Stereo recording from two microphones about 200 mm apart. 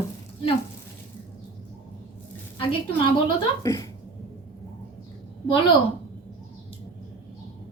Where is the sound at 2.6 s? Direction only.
25° left (ahead or behind).